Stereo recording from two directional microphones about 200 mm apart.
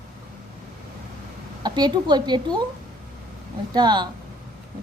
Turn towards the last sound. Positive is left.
turn(degrees=-20)  # may be behind; listen again after turning